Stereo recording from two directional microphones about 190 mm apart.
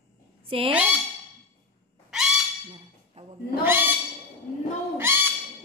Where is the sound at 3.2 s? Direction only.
35° right (ahead or behind).